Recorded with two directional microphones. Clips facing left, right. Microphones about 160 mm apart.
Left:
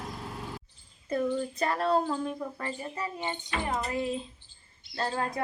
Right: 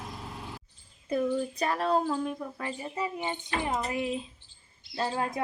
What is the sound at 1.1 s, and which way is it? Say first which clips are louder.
A woman's voice: right 1 dB; 5° right (ahead or behind).